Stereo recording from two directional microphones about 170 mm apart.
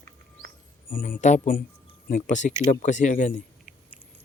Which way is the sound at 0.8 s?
55° left (ahead or behind).